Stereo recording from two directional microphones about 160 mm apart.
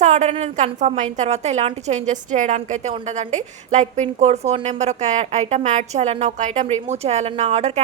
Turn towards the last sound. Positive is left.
turn(degrees=-45)  # may be behind; listen again after turning